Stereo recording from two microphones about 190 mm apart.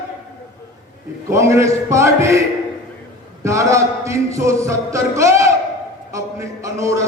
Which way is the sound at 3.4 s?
15° right (ahead or behind).